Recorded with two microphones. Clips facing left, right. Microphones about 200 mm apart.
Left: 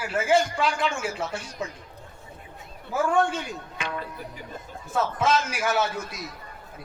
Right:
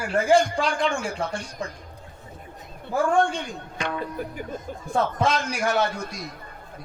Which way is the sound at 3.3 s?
5° left (ahead or behind).